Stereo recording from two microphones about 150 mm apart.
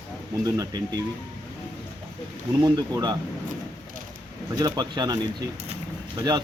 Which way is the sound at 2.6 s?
25° right (ahead or behind).